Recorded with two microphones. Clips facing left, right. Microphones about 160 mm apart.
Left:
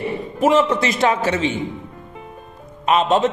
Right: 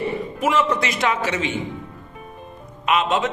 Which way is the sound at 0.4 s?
30° left (ahead or behind).